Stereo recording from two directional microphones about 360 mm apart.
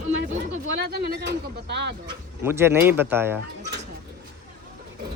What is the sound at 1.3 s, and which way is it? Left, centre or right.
Speech, right.